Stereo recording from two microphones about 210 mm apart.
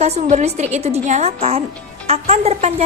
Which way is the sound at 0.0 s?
30° right (ahead or behind).